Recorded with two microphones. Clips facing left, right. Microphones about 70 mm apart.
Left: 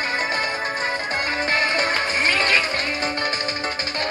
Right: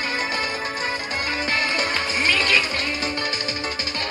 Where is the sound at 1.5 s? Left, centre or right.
Left.